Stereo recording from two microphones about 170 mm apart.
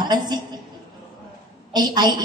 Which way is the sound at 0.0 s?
25° right (ahead or behind).